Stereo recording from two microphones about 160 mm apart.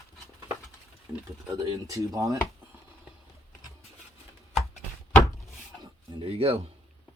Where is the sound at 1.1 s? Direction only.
20° right (ahead or behind).